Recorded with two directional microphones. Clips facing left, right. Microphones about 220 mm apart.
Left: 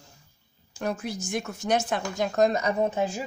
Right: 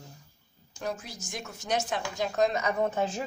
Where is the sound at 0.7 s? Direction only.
60° left (ahead or behind); by 2.7 s 40° left (ahead or behind).